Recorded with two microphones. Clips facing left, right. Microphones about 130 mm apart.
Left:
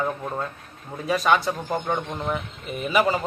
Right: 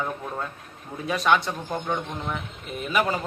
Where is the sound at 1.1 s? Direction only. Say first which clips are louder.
Left 2 dB; centre (ahead or behind).